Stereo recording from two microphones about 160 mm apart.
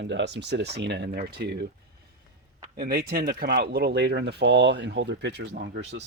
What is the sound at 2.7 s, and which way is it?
Speech, 70° right (ahead or behind).